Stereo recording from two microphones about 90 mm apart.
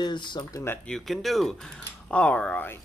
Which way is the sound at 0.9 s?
Centre (ahead or behind).